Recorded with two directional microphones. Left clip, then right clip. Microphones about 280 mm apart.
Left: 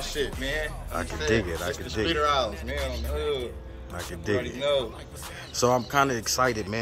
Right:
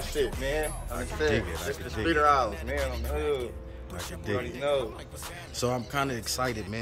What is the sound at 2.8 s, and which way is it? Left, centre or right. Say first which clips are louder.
Speech: left 1 dB; centre.